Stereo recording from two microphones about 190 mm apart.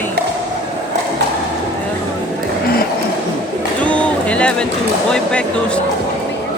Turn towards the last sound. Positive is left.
turn(degrees=5)  # may be behind; listen again after turning